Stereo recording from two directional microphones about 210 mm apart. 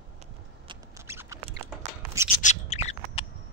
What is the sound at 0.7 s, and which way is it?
Rodents, 15° right (ahead or behind).